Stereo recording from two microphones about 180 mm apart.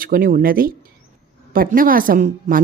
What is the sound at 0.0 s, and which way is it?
Speech, 50° right (ahead or behind).